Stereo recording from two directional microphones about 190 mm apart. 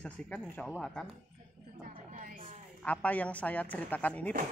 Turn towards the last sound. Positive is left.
turn(degrees=10)  # may be behind; listen again after turning